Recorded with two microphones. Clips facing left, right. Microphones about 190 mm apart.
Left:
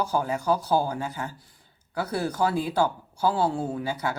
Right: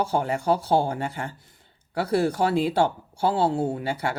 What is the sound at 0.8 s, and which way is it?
Speech, 60° right (ahead or behind).